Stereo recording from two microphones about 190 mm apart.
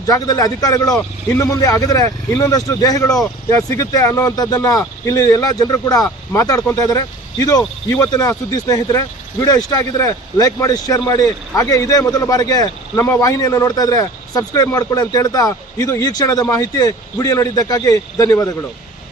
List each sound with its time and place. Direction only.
0.0 s a man's voice: 20° left (ahead or behind)